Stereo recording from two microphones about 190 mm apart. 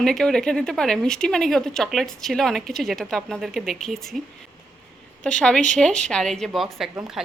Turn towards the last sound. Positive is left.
turn(degrees=-5)  # may be behind; listen again after turning